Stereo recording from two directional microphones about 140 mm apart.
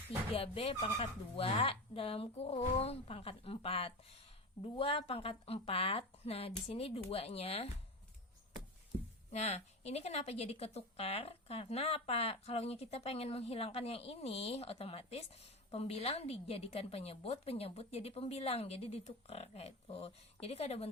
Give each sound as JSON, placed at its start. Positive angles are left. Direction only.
{"t": 0.3, "sound": "speech", "side_deg": 45}
{"t": 9.3, "sound": "speech", "side_deg": 50}